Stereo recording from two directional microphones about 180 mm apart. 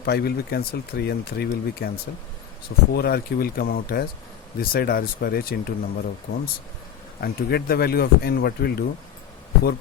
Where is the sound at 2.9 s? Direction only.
60° left (ahead or behind).